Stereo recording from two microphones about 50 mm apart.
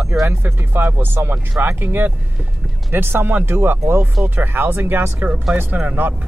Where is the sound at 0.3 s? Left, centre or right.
Right.